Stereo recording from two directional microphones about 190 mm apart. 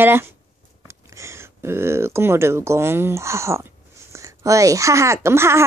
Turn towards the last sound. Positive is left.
turn(degrees=-15)  # may be behind; listen again after turning